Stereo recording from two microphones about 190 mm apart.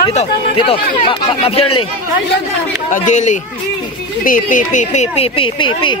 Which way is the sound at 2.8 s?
40° left (ahead or behind).